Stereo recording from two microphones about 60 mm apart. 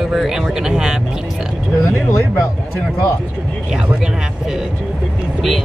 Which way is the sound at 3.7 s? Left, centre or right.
Centre.